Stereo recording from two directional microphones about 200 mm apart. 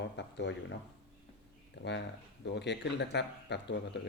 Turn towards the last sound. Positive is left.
turn(degrees=60)  # may be behind; listen again after turning